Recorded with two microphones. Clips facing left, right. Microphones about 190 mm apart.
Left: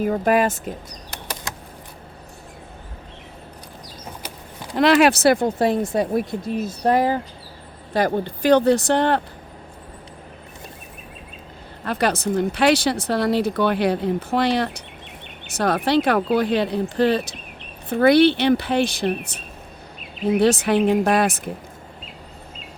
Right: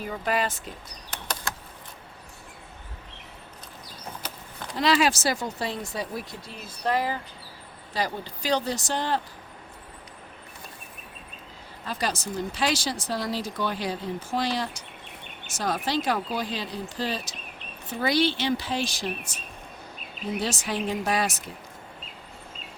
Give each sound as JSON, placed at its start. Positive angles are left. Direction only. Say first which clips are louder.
{"t": 0.0, "sound": "speech", "louder": "left 9 dB", "side_deg": 50}
{"t": 4.7, "sound": "speech", "louder": "left 8 dB", "side_deg": 65}
{"t": 11.9, "sound": "speech", "louder": "left 9 dB", "side_deg": 60}